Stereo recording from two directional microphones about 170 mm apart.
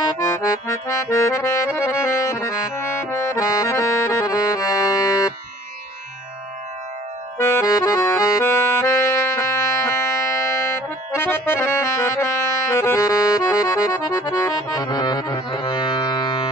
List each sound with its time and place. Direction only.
0.2 s accordion: 20° left (ahead or behind)
7.3 s accordion: 15° left (ahead or behind)